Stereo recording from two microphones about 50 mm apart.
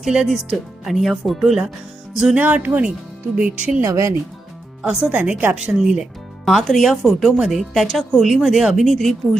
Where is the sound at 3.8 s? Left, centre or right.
Right.